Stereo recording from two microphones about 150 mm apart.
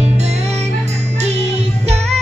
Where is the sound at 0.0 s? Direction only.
45° right (ahead or behind).